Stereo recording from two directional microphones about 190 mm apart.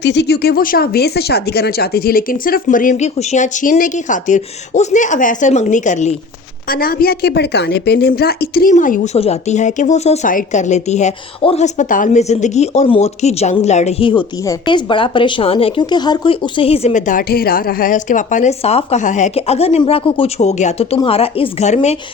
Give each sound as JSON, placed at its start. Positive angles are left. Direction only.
{"t": 0.0, "sound": "speech", "side_deg": 65}
{"t": 6.7, "sound": "a woman's voice", "side_deg": 50}